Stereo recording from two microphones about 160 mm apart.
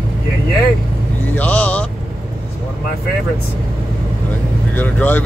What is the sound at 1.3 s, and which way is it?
Speech, 10° left (ahead or behind).